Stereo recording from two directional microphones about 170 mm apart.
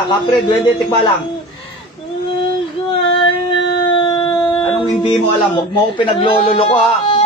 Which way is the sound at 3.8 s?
25° left (ahead or behind).